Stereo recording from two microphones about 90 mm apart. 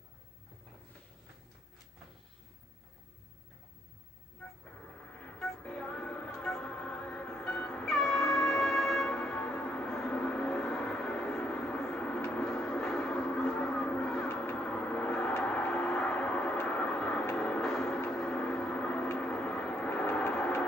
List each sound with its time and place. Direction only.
5.2 s music: 10° left (ahead or behind)
9.1 s gong: 15° left (ahead or behind)
14.2 s a sound: 25° left (ahead or behind)
14.6 s vehicle: 10° left (ahead or behind)
17.4 s a sound: 10° left (ahead or behind)
18.1 s gong: 10° left (ahead or behind)
19.1 s vehicle: 10° left (ahead or behind)